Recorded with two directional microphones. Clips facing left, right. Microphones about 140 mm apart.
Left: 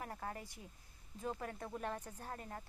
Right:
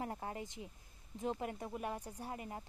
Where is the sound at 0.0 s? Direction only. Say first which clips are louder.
Right 3 dB; 25° right (ahead or behind).